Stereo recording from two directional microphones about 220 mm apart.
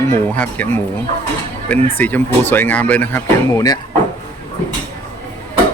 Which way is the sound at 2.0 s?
10° left (ahead or behind).